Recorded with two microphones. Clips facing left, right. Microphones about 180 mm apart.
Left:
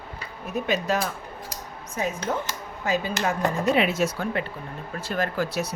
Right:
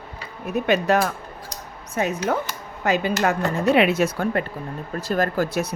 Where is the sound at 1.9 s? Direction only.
70° right (ahead or behind); by 4.4 s 55° right (ahead or behind).